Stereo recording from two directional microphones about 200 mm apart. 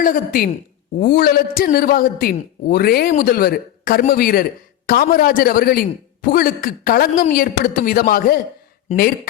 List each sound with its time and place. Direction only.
0.0 s a man's voice: 45° left (ahead or behind)